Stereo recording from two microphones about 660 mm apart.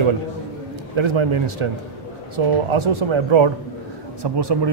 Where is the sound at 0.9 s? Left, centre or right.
Right.